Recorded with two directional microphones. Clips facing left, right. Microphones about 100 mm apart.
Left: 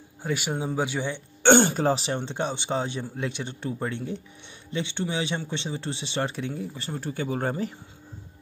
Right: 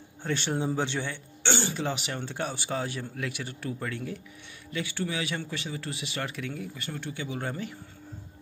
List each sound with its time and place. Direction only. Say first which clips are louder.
0.2 s speech: left 1 dB; 10° left (ahead or behind)
1.4 s speech: left 11 dB; 50° left (ahead or behind)